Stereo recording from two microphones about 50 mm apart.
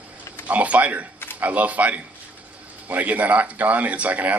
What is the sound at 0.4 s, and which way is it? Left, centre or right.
A man's voice, right.